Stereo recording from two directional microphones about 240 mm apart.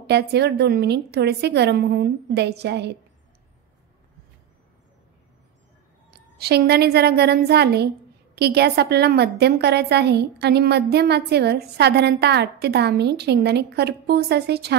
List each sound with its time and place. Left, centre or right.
0.0 s a woman's voice: right
6.3 s a woman's voice: right